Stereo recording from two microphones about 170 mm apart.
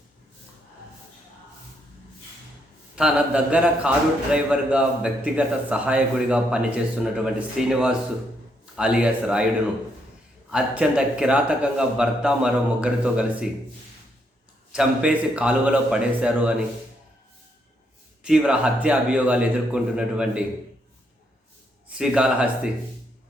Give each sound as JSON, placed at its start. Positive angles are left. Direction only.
{"t": 2.9, "sound": "a man's voice", "side_deg": -5}
{"t": 10.5, "sound": "a man's voice", "side_deg": -5}
{"t": 14.7, "sound": "a man's voice", "side_deg": -5}
{"t": 18.2, "sound": "a man's voice", "side_deg": -5}
{"t": 21.8, "sound": "a man's voice", "side_deg": -5}